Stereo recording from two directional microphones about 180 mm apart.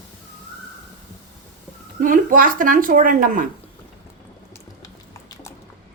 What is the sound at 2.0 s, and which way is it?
Speech, 50° right (ahead or behind).